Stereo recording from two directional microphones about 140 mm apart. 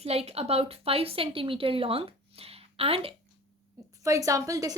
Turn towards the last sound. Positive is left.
turn(degrees=-25)  # may be behind; listen again after turning